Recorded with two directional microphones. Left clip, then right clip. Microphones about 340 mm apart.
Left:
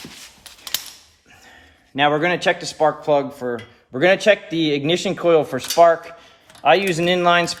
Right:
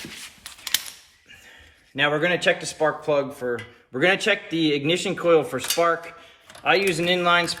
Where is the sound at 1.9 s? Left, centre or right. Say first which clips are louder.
Left 4 dB; left.